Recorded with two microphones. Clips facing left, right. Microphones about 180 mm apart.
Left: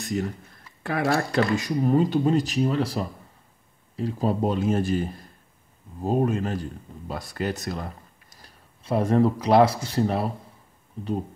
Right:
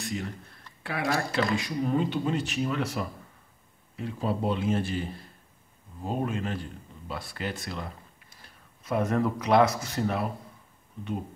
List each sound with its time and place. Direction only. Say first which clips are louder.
0.8 s a man's voice: left 5 dB; 45° left (ahead or behind)